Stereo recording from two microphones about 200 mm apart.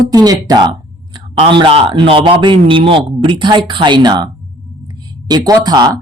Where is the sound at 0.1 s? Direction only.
20° right (ahead or behind).